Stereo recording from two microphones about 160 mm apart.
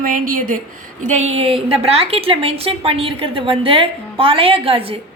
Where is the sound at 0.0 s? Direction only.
60° right (ahead or behind).